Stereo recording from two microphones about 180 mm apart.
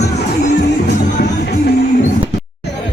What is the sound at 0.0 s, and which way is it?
Music, 65° left (ahead or behind).